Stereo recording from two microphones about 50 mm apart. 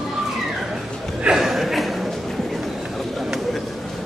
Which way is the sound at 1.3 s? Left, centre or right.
Centre.